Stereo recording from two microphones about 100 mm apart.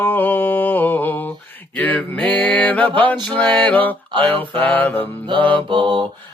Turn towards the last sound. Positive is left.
turn(degrees=-55)  # may be behind; listen again after turning